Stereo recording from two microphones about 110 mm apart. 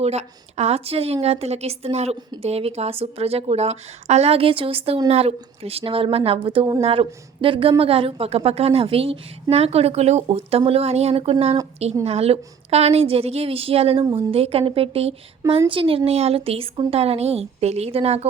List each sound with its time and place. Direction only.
0.0 s a woman's voice: 75° right (ahead or behind)
10.2 s a woman's voice: 65° right (ahead or behind)
14.0 s a woman's voice: 45° right (ahead or behind)
14.3 s a woman's voice: 65° right (ahead or behind)